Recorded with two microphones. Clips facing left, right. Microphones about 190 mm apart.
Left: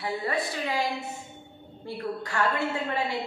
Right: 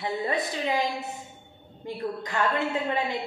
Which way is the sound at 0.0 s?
20° right (ahead or behind).